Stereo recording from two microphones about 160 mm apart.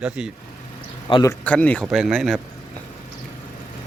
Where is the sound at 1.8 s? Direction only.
5° right (ahead or behind).